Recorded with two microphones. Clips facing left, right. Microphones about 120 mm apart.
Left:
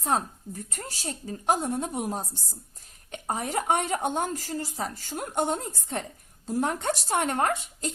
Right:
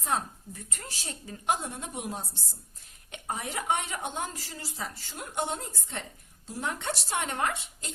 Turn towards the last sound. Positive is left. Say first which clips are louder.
# left 5 dB
turn(degrees=45)  # may be behind; listen again after turning